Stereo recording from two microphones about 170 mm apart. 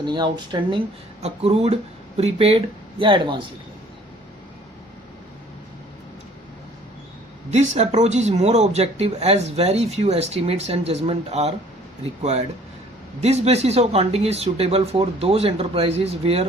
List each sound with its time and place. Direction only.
0.0 s speech: 25° right (ahead or behind)
1.2 s speech: 40° right (ahead or behind)
7.5 s speech: 40° right (ahead or behind)